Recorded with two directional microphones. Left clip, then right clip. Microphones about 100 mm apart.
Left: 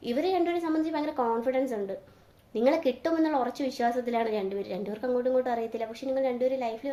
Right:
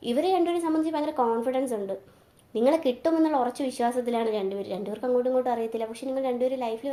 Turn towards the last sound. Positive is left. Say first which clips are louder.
# right 1 dB
turn(degrees=-20)  # may be behind; listen again after turning